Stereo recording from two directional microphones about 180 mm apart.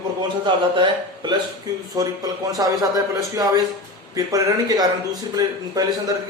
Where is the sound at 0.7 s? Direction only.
25° right (ahead or behind).